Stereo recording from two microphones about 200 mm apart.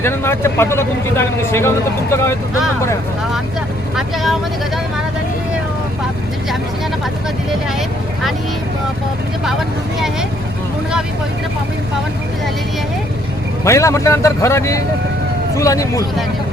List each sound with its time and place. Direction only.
0.0 s speech: 10° left (ahead or behind)
3.9 s speech: centre (ahead or behind)
13.7 s speech: 15° left (ahead or behind)